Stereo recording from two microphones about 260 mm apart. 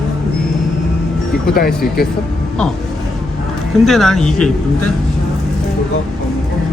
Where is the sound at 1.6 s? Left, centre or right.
Left.